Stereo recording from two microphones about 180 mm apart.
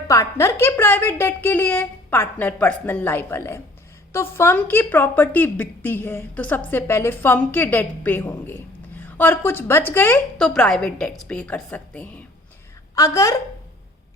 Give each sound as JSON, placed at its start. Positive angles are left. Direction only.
{"t": 0.1, "sound": "a woman's voice", "side_deg": 15}
{"t": 13.0, "sound": "a woman's voice", "side_deg": 20}